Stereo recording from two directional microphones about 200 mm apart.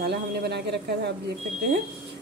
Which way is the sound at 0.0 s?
55° right (ahead or behind).